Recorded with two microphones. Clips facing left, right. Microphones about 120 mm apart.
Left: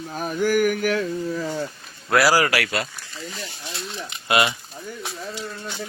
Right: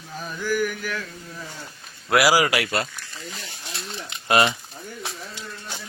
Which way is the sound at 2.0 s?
15° right (ahead or behind).